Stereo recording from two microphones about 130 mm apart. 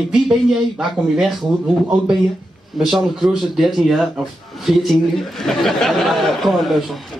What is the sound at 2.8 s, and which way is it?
A man's voice, centre (ahead or behind).